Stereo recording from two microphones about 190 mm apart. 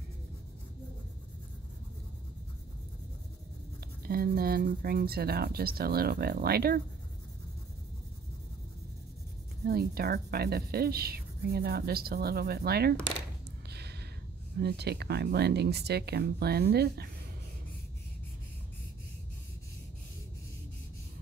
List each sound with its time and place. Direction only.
4.0 s a woman's voice: 55° right (ahead or behind)
9.7 s a woman's voice: 55° right (ahead or behind)
13.7 s a sound: 60° right (ahead or behind)
14.6 s a woman's voice: 60° right (ahead or behind)